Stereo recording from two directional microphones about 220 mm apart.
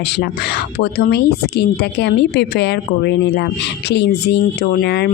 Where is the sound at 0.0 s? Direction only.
50° left (ahead or behind).